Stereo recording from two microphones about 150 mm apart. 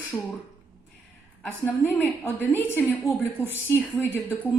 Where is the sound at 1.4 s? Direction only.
10° left (ahead or behind).